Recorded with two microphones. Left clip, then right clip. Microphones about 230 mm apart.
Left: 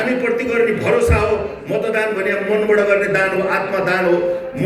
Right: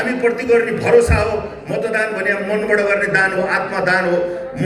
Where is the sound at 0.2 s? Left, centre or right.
Right.